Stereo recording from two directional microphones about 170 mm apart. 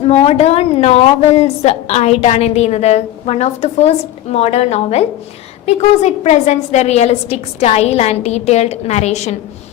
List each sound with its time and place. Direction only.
0.0 s a woman's voice: 40° left (ahead or behind)